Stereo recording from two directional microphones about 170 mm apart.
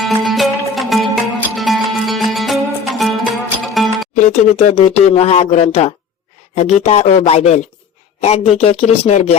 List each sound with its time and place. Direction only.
0.0 s music: centre (ahead or behind)
4.1 s speech: 45° left (ahead or behind)